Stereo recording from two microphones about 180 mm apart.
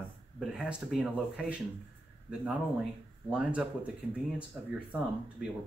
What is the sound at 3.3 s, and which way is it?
Speech, 5° right (ahead or behind).